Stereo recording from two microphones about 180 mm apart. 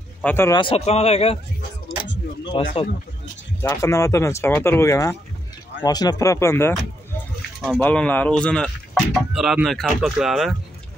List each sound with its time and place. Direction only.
0.2 s speech: 10° left (ahead or behind)
0.6 s a man's voice: 30° left (ahead or behind)
2.4 s speech: 30° left (ahead or behind)
3.6 s speech: 15° left (ahead or behind)
7.8 s speech: 10° left (ahead or behind)